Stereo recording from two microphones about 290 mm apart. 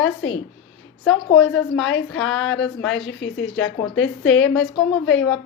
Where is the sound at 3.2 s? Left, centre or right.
Left.